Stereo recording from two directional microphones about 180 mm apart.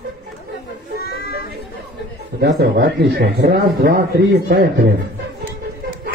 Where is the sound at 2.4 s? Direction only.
65° right (ahead or behind).